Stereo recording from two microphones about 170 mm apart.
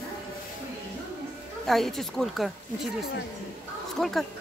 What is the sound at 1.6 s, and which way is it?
Speech, centre (ahead or behind).